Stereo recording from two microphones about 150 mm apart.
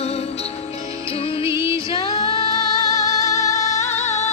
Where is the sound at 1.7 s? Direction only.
30° left (ahead or behind).